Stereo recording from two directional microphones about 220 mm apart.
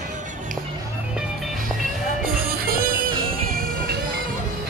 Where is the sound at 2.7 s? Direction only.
40° right (ahead or behind).